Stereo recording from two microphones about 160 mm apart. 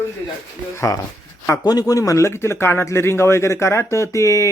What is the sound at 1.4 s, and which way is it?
Speech, 20° left (ahead or behind).